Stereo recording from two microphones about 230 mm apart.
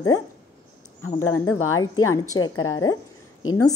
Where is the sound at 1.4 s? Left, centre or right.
Left.